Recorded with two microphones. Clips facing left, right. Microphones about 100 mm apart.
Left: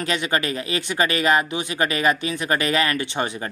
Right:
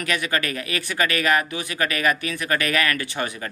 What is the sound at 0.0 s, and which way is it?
Speech, 25° left (ahead or behind).